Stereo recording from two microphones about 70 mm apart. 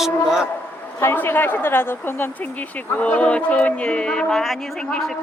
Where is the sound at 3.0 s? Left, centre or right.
Centre.